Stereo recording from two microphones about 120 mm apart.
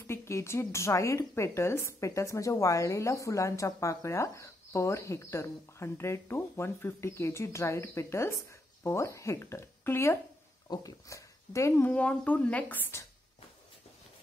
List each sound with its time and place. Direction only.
0.0 s a woman's voice: 25° left (ahead or behind)
11.9 s speech: 10° left (ahead or behind)